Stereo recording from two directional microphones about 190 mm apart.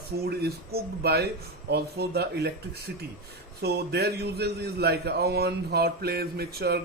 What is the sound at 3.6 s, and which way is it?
A man's voice, 55° right (ahead or behind).